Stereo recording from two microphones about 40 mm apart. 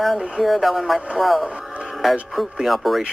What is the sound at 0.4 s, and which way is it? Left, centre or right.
Speech, centre.